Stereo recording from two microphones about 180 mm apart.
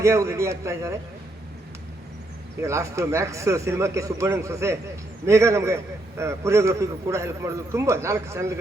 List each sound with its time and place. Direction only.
0.0 s a man's voice: 15° right (ahead or behind)
2.6 s a man's voice: 15° right (ahead or behind)